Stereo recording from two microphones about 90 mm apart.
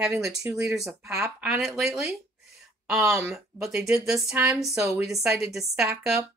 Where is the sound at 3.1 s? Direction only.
5° right (ahead or behind).